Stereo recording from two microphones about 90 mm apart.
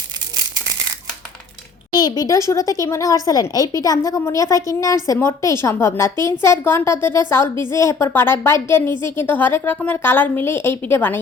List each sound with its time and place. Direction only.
1.9 s a woman's voice: 50° left (ahead or behind)
8.0 s a woman's voice: 25° left (ahead or behind)